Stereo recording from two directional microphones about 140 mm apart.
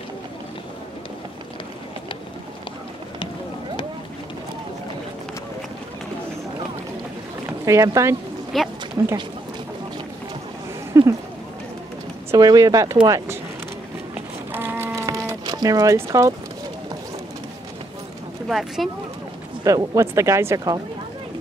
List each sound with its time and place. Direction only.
7.4 s speech: 20° right (ahead or behind)
8.5 s speech: centre (ahead or behind)
9.0 s speech: 20° right (ahead or behind)
10.9 s a sound: 20° right (ahead or behind)
12.3 s speech: 25° right (ahead or behind)
14.5 s a sound: 15° right (ahead or behind)
18.5 s speech: centre (ahead or behind)
19.6 s speech: 25° right (ahead or behind)